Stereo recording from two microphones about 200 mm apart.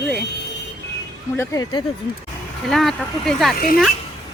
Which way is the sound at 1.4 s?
15° left (ahead or behind).